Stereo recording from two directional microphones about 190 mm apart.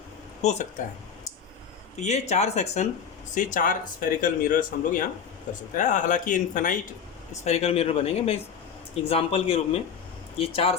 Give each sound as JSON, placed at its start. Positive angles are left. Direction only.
{"t": 0.4, "sound": "speech", "side_deg": 35}
{"t": 2.0, "sound": "speech", "side_deg": 35}